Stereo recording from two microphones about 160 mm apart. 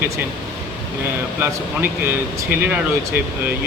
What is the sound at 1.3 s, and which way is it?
Speech, 15° right (ahead or behind).